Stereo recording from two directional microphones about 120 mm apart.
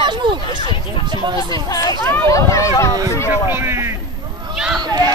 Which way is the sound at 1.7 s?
30° left (ahead or behind).